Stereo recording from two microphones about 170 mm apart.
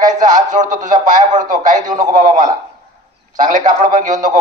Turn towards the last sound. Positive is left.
turn(degrees=-50)  # may be behind; listen again after turning